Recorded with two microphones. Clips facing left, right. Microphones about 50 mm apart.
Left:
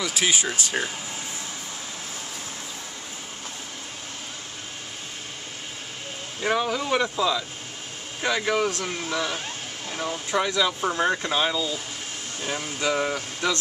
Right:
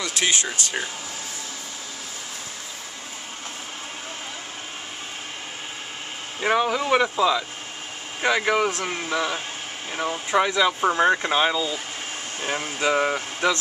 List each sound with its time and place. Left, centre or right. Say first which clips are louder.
0.0 s speech: even; centre
6.4 s speech: right 3 dB; centre
12.4 s speech: right 3 dB; right